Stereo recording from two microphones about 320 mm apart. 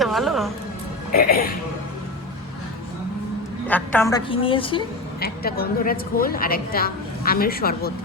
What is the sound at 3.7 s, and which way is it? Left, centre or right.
A woman's voice, centre.